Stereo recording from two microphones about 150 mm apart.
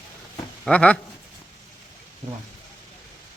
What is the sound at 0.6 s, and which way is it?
Speech, 10° left (ahead or behind).